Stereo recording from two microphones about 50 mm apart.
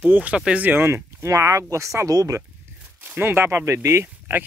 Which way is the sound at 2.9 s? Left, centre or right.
Right.